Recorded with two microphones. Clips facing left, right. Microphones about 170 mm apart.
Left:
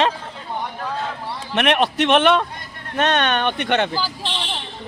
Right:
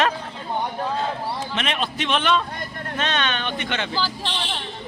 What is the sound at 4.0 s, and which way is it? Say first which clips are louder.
Speech: even; 10° left (ahead or behind).